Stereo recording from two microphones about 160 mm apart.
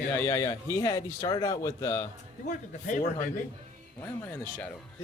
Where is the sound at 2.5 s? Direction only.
55° left (ahead or behind).